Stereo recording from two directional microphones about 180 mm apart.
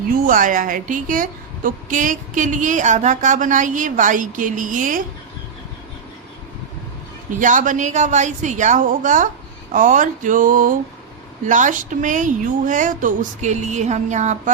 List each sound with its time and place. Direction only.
0.3 s a woman's voice: 50° right (ahead or behind)
7.3 s a woman's voice: 45° right (ahead or behind)